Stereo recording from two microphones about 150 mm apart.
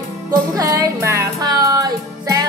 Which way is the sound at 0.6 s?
25° right (ahead or behind).